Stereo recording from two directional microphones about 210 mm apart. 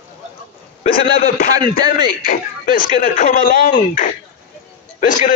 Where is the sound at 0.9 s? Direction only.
45° left (ahead or behind).